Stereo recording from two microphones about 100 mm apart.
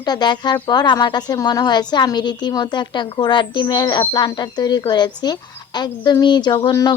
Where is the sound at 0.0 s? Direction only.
45° left (ahead or behind).